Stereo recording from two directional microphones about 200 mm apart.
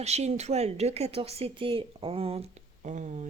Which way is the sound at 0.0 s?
35° right (ahead or behind).